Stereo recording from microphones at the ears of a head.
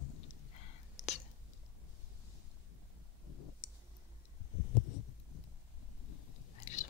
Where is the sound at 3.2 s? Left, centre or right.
Left.